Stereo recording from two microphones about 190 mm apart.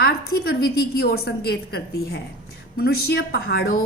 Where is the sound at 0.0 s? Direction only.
55° left (ahead or behind).